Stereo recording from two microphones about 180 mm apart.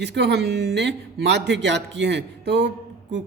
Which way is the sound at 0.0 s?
70° right (ahead or behind).